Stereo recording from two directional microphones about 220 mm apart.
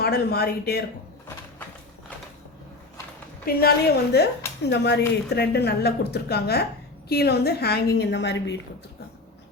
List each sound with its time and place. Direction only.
0.0 s speech: 45° left (ahead or behind)
3.5 s a woman's voice: 40° left (ahead or behind)